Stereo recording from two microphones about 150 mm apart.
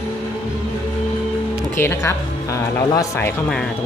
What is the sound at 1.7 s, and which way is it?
Speech, 15° left (ahead or behind).